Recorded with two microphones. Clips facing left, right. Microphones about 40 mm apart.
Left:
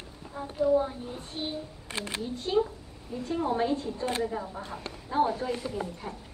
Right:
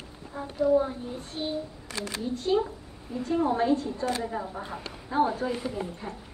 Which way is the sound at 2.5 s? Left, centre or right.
Centre.